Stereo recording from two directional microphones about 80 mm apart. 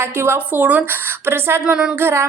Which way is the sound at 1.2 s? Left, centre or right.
Right.